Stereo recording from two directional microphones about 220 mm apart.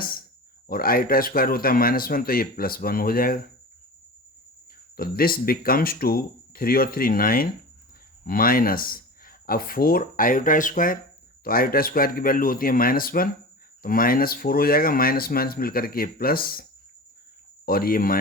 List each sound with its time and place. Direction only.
0.0 s a sound: 40° left (ahead or behind)
0.7 s speech: 40° left (ahead or behind)
4.9 s speech: 40° left (ahead or behind)
17.7 s speech: 40° left (ahead or behind)